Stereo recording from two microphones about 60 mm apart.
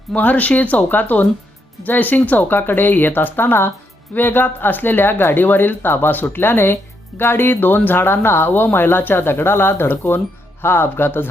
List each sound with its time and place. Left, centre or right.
0.1 s speech: left